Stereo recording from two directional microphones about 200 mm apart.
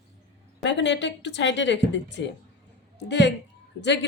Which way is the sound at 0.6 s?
65° left (ahead or behind).